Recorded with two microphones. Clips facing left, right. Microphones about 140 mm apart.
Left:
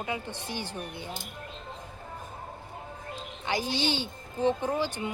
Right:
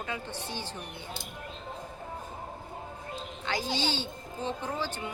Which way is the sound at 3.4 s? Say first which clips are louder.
Left 2 dB; 15° left (ahead or behind).